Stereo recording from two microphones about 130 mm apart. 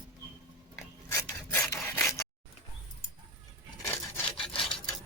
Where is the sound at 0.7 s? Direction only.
20° left (ahead or behind).